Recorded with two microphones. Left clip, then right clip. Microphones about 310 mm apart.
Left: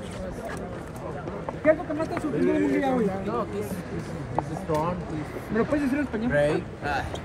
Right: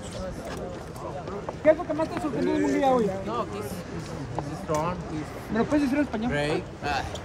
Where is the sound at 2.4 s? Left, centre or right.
Right.